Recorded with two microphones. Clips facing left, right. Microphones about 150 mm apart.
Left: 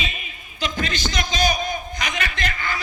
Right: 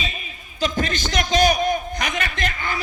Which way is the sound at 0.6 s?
45° right (ahead or behind).